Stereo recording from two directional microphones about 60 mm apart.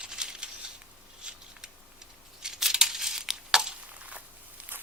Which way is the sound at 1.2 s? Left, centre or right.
Centre.